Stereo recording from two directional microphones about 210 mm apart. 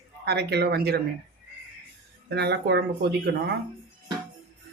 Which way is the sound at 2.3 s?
55° right (ahead or behind).